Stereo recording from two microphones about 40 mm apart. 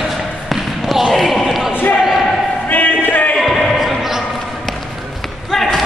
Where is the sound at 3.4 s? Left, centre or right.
Centre.